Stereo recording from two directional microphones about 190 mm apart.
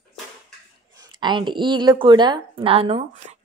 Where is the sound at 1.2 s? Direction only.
25° right (ahead or behind).